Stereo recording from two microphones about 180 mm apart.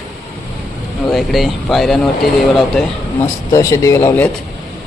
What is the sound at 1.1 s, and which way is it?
Speech, centre (ahead or behind).